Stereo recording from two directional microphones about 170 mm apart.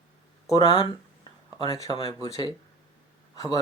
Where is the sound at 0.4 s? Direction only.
20° left (ahead or behind).